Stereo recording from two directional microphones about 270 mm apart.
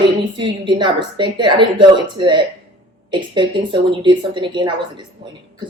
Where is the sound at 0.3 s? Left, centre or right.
Centre.